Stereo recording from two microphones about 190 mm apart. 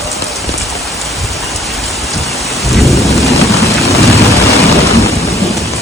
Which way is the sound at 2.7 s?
Centre (ahead or behind).